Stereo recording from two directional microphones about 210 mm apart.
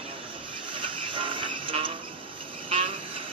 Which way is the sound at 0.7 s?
25° right (ahead or behind).